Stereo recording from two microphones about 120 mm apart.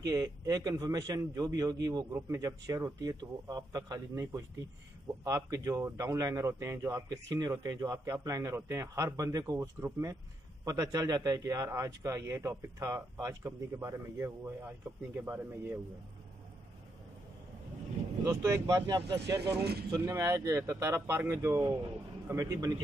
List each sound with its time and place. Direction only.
0.0 s speech: 35° right (ahead or behind)
18.2 s speech: 25° right (ahead or behind)